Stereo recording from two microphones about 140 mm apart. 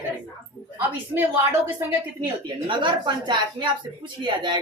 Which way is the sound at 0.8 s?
15° right (ahead or behind).